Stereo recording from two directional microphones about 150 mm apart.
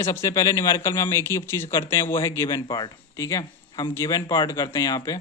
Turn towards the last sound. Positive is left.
turn(degrees=25)  # may be behind; listen again after turning